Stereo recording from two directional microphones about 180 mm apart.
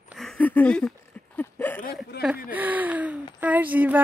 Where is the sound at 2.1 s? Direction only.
65° left (ahead or behind).